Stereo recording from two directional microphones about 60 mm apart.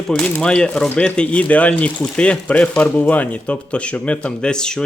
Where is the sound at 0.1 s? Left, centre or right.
Centre.